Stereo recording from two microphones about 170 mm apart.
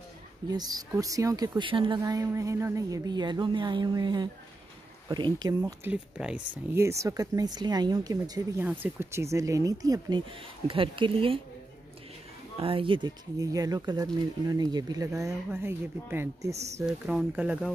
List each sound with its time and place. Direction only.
0.5 s a woman's voice: 25° right (ahead or behind)
5.6 s speech: 10° right (ahead or behind)
6.8 s a woman's voice: 15° right (ahead or behind)
12.5 s a woman's voice: 35° right (ahead or behind); by 16.5 s 15° right (ahead or behind)
16.5 s speech: 40° right (ahead or behind)
16.8 s speech: 5° right (ahead or behind)